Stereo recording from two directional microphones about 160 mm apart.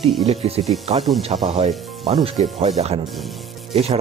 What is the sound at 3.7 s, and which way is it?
Speech, 40° right (ahead or behind).